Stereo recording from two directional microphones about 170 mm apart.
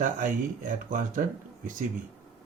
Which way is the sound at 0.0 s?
50° right (ahead or behind).